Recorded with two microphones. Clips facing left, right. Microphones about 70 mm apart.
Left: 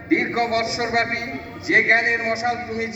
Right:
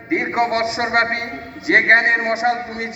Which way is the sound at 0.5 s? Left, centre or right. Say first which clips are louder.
Right 3 dB; right.